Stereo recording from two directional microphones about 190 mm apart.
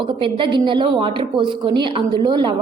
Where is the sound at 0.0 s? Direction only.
25° right (ahead or behind).